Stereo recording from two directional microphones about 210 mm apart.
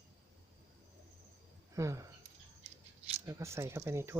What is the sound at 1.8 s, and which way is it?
Speech, 15° right (ahead or behind).